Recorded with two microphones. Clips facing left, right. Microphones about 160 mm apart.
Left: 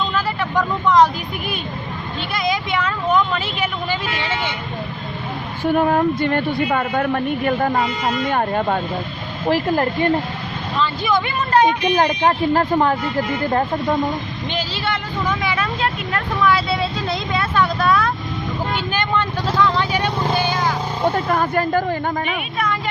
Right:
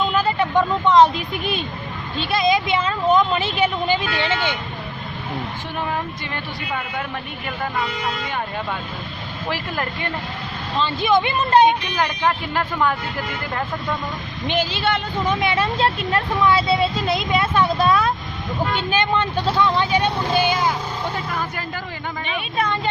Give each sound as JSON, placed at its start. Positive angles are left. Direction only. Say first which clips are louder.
{"t": 0.2, "sound": "speech", "louder": "right 4 dB", "side_deg": -25}
{"t": 5.6, "sound": "a woman's voice", "louder": "left 13 dB", "side_deg": 50}
{"t": 9.5, "sound": "speech", "louder": "left 9 dB", "side_deg": 35}
{"t": 10.8, "sound": "speech", "louder": "right 1 dB", "side_deg": -20}
{"t": 11.9, "sound": "speech", "louder": "left 5 dB", "side_deg": 35}
{"t": 14.4, "sound": "speech", "louder": "right 5 dB", "side_deg": -20}
{"t": 21.0, "sound": "a woman's voice", "louder": "left 7 dB", "side_deg": 50}
{"t": 22.5, "sound": "speech", "louder": "right 2 dB", "side_deg": -25}